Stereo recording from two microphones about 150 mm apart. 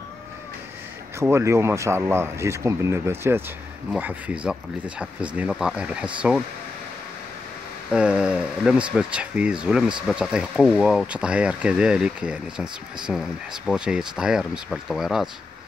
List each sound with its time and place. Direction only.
1.2 s speech: 20° right (ahead or behind)
7.9 s speech: 5° right (ahead or behind)